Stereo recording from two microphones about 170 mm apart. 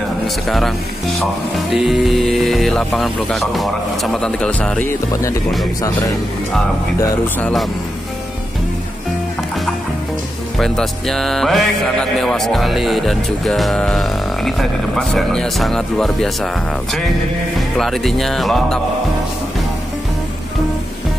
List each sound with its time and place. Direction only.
0.5 s speech: centre (ahead or behind)
5.1 s speech: 20° left (ahead or behind)
7.0 s speech: 10° left (ahead or behind)
10.6 s speech: centre (ahead or behind)
17.6 s speech: centre (ahead or behind)